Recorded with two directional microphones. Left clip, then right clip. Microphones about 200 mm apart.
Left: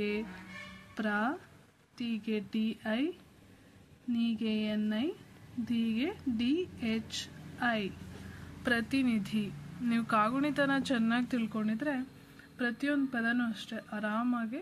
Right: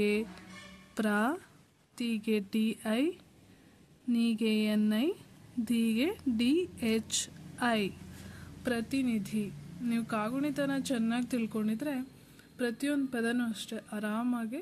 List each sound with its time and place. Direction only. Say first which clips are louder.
0.9 s speech: right 2 dB; 40° right (ahead or behind)
4.1 s speech: right 3 dB; 40° right (ahead or behind)
8.6 s a woman's voice: left 2 dB; 15° right (ahead or behind)